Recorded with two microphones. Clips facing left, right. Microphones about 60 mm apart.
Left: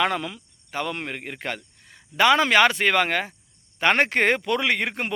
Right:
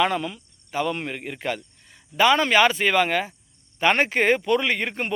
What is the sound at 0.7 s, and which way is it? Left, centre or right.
Speech, left.